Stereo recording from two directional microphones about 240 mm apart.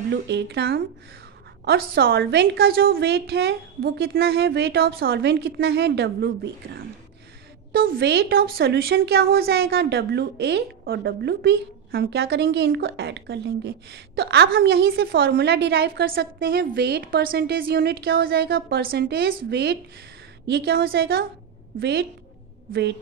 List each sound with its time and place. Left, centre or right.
0.1 s a woman's voice: right